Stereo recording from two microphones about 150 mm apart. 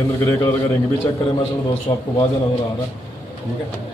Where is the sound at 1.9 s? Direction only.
15° left (ahead or behind).